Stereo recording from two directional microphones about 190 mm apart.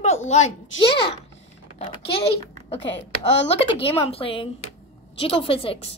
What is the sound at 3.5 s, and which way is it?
A woman's voice, 30° left (ahead or behind).